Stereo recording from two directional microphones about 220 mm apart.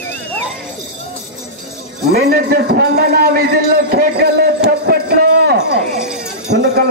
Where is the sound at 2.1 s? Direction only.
45° right (ahead or behind).